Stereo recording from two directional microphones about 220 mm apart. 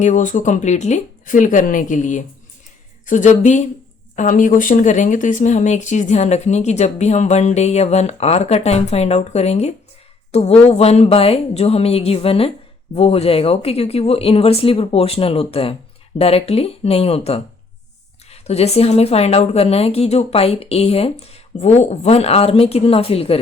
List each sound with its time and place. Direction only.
0.0 s speech: 35° left (ahead or behind)